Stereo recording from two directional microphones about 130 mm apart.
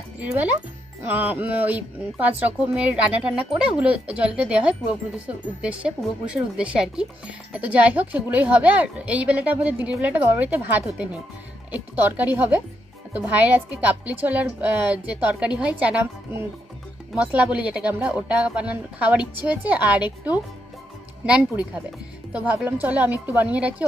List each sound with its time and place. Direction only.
0.2 s speech: 10° right (ahead or behind)
6.3 s speech: 5° right (ahead or behind)
21.2 s speech: 10° right (ahead or behind)